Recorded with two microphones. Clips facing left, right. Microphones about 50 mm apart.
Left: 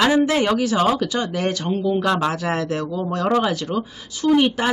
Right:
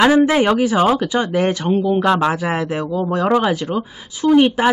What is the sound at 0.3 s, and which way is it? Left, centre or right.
Speech, centre.